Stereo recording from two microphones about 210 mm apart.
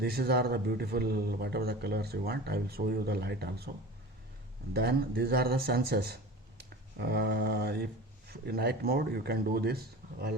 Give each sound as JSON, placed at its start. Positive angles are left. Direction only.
{"t": 0.0, "sound": "speech", "side_deg": -50}
{"t": 4.7, "sound": "speech", "side_deg": -50}